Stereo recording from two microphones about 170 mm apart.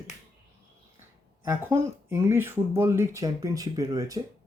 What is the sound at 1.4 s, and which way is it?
Speech, 15° right (ahead or behind).